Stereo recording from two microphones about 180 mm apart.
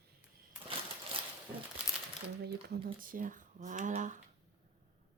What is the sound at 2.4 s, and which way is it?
Speech, 60° right (ahead or behind).